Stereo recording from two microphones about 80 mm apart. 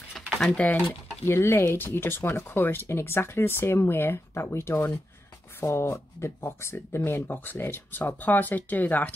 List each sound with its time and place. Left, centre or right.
0.6 s speech: left